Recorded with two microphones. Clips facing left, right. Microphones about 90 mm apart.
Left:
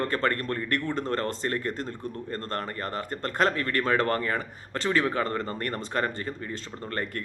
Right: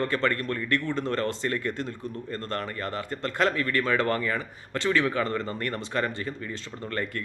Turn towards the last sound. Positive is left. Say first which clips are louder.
# right 1 dB
turn(degrees=40)  # may be behind; listen again after turning